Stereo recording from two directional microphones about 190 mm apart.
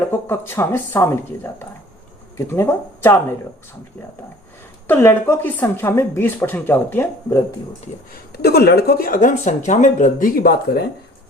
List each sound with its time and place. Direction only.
0.0 s speech: 10° left (ahead or behind)
4.9 s speech: 10° left (ahead or behind)
8.1 s speech: 55° left (ahead or behind)